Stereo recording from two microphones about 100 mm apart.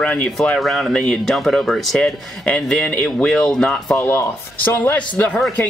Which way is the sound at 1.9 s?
10° left (ahead or behind).